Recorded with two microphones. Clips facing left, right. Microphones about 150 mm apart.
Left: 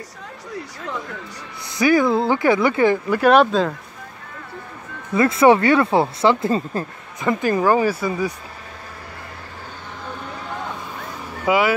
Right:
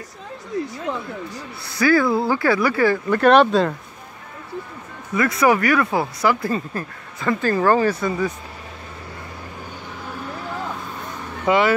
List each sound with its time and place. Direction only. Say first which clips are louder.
1.7 s speech: left 1 dB; 20° left (ahead or behind)
3.1 s speech: right 3 dB; 5° left (ahead or behind)
5.1 s speech: left 4 dB; 25° left (ahead or behind); by 8.3 s 10° left (ahead or behind)
11.4 s speech: even; 5° left (ahead or behind)